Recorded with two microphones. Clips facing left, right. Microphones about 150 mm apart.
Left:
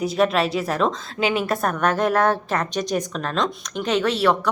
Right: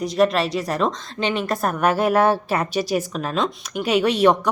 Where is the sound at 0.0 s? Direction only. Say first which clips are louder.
Right 1 dB; centre (ahead or behind).